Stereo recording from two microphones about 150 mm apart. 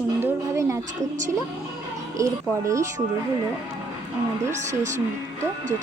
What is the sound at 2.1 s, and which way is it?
Speech, 20° right (ahead or behind).